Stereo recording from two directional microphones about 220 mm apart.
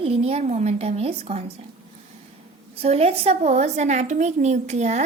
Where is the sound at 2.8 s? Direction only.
30° right (ahead or behind).